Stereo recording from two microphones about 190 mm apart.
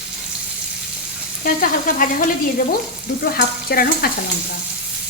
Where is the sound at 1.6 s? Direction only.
45° left (ahead or behind).